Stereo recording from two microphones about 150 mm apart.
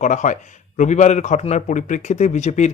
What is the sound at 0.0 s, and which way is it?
A man's voice, 55° left (ahead or behind).